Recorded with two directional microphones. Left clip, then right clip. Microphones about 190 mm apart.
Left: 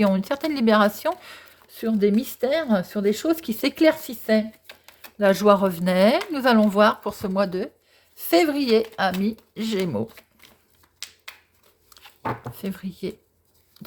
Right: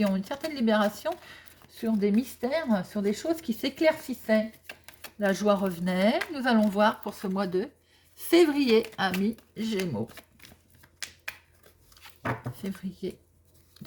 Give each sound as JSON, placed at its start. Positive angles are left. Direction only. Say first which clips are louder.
{"t": 0.0, "sound": "speech", "louder": "left 8 dB", "side_deg": 45}
{"t": 4.6, "sound": "a sound", "louder": "even", "side_deg": 0}
{"t": 5.2, "sound": "speech", "louder": "left 8 dB", "side_deg": 40}
{"t": 9.2, "sound": "speech", "louder": "left 4 dB", "side_deg": 45}
{"t": 12.6, "sound": "speech", "louder": "left 6 dB", "side_deg": 40}